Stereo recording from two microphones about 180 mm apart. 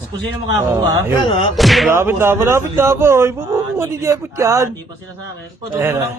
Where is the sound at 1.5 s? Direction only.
Centre (ahead or behind).